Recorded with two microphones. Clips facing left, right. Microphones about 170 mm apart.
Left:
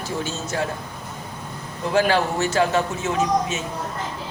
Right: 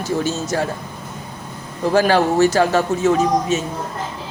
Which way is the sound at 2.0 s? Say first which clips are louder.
Right 5 dB; 40° right (ahead or behind).